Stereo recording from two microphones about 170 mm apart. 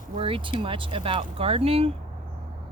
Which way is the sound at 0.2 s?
30° right (ahead or behind).